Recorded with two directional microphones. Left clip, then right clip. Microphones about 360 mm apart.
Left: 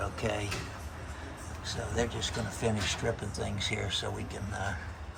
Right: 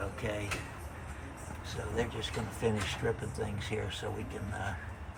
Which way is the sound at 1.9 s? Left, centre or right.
Centre.